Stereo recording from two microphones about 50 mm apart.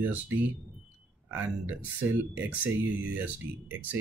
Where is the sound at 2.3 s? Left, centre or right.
Right.